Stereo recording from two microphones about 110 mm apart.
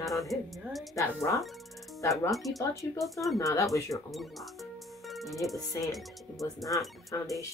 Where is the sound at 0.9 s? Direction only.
30° left (ahead or behind).